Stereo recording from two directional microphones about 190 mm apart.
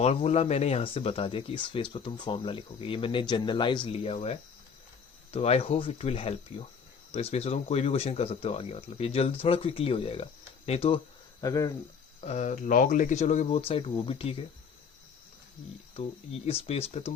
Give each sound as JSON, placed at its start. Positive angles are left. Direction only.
{"t": 0.0, "sound": "speech", "side_deg": 35}
{"t": 11.3, "sound": "speech", "side_deg": 15}
{"t": 12.2, "sound": "speech", "side_deg": 35}
{"t": 16.5, "sound": "speech", "side_deg": 30}